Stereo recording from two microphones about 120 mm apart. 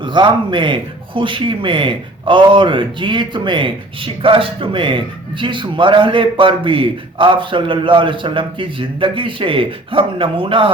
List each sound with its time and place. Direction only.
0.0 s speech: 40° right (ahead or behind)